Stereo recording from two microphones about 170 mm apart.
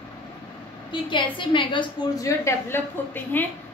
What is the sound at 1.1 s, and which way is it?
A woman's voice, 30° left (ahead or behind).